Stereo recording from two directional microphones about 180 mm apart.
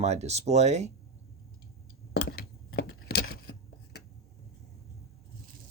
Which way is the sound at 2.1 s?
60° left (ahead or behind).